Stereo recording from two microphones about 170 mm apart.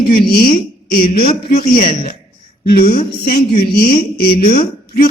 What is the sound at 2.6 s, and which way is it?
A woman's voice, 65° left (ahead or behind).